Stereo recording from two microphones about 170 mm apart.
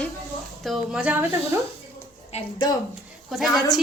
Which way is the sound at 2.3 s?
40° left (ahead or behind).